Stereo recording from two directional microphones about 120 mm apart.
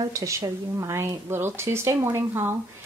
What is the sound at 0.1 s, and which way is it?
A woman's voice, 25° right (ahead or behind).